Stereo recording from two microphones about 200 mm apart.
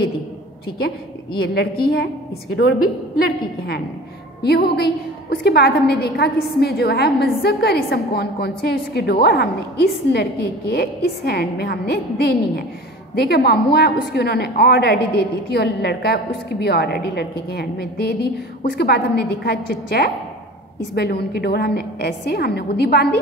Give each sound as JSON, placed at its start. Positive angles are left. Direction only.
{"t": 1.4, "sound": "a woman's voice", "side_deg": 55}
{"t": 3.2, "sound": "a woman's voice", "side_deg": 50}